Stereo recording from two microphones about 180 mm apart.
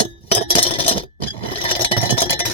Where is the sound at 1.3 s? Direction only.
30° left (ahead or behind).